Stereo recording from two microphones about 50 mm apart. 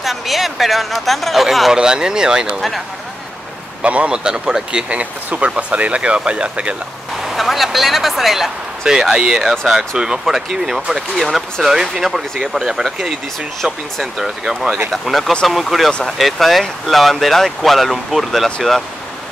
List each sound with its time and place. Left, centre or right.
0.0 s speech: centre
1.7 s speech: centre
3.8 s speech: right
4.8 s speech: right
7.2 s speech: centre
8.8 s speech: centre
14.1 s speech: centre